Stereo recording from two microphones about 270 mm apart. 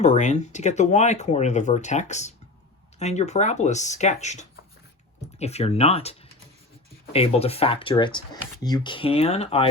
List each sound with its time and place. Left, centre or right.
0.0 s speech: left